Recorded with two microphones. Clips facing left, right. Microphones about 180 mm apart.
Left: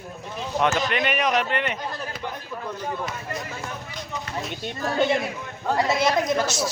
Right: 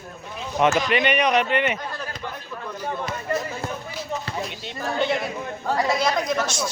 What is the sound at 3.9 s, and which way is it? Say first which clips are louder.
Basketball bounce: right 3 dB; centre (ahead or behind).